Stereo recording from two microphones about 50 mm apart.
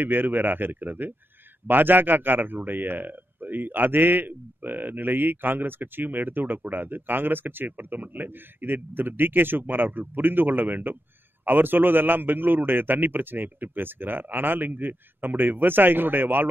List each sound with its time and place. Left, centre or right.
0.0 s a man's voice: right